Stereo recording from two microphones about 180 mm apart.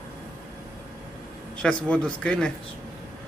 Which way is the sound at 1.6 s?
5° left (ahead or behind).